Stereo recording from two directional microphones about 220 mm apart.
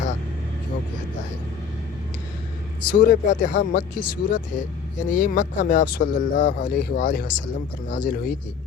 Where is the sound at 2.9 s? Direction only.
35° left (ahead or behind).